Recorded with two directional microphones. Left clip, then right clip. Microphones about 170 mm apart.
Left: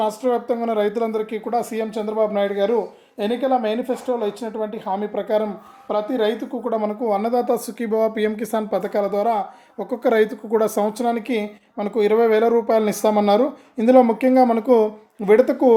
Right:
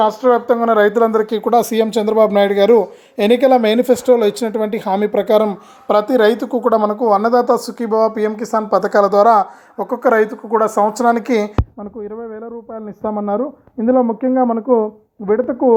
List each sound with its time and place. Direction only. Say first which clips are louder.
0.0 s speech: right 8 dB; 10° right (ahead or behind)
0.9 s speech: right 9 dB; 25° right (ahead or behind)
1.5 s a woman's voice: right 9 dB; 60° right (ahead or behind)
7.1 s speech: right 7 dB; centre (ahead or behind)
9.9 s speech: right 4 dB; 25° left (ahead or behind)
11.0 s speech: right 8 dB; 5° left (ahead or behind)
11.8 s speech: left 11 dB; 15° left (ahead or behind)